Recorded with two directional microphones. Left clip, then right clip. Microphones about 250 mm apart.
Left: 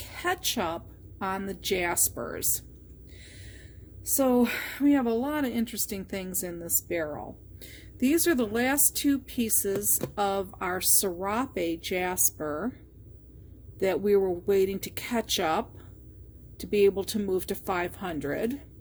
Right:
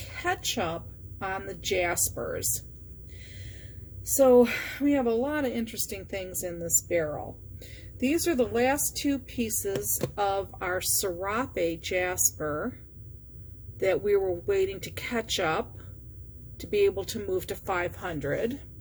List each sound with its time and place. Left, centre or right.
0.2 s speech: left
4.2 s speech: left
13.7 s speech: left